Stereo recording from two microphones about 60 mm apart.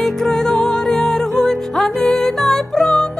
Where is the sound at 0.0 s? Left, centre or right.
Centre.